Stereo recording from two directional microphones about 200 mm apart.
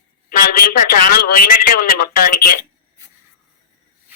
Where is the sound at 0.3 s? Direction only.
50° left (ahead or behind).